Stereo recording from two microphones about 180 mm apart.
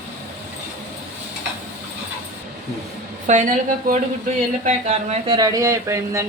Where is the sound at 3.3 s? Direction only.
45° right (ahead or behind).